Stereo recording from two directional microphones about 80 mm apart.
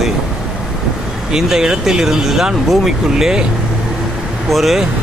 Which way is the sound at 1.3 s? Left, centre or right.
Centre.